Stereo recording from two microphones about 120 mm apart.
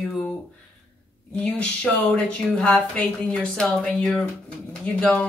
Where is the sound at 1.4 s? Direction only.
10° left (ahead or behind).